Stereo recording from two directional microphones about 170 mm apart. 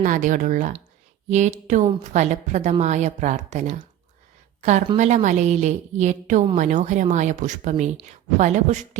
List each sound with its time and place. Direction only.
0.0 s a woman's voice: 50° right (ahead or behind)
4.9 s a woman's voice: 45° right (ahead or behind)